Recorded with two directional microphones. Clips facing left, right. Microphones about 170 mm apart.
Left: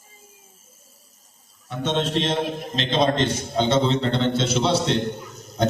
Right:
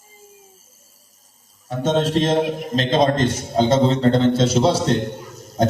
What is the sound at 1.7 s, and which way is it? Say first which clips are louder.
A man's voice: right 5 dB; 40° right (ahead or behind).